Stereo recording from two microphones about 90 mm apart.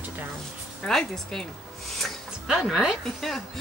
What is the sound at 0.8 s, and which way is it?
Speech, 5° left (ahead or behind).